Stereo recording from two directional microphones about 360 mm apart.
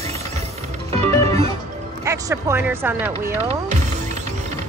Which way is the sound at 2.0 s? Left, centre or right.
Centre.